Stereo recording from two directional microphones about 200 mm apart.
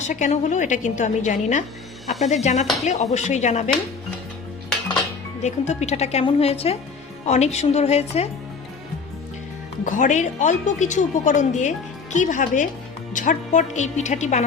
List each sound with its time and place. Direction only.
0.1 s speech: 35° left (ahead or behind)
5.4 s speech: 35° left (ahead or behind)
9.8 s speech: 40° left (ahead or behind)